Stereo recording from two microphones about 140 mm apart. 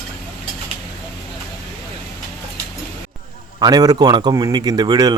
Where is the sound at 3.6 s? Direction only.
25° right (ahead or behind).